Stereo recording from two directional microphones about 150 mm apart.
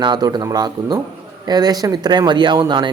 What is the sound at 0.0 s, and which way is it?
Speech, 30° right (ahead or behind).